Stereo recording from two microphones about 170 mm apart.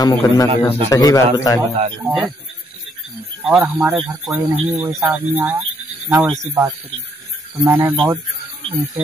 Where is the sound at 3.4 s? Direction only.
Centre (ahead or behind).